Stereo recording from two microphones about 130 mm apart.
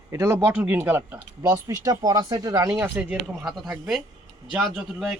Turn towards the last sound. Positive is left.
turn(degrees=0)  # may be behind; listen again after turning